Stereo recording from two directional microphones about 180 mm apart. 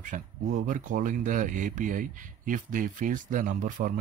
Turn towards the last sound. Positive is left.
turn(degrees=-45)  # may be behind; listen again after turning